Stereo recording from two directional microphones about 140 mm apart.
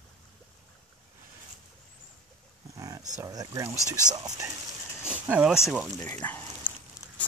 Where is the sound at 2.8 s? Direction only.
25° right (ahead or behind).